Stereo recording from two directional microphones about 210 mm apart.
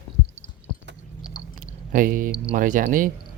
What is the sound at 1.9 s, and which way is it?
Speech, 40° right (ahead or behind).